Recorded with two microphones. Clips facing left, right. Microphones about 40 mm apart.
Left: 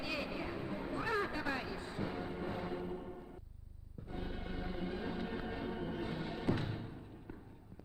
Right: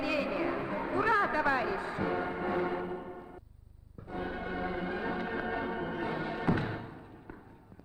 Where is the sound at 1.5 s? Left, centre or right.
Right.